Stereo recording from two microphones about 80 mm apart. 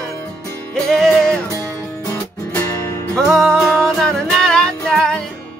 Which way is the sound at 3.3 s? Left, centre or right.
Centre.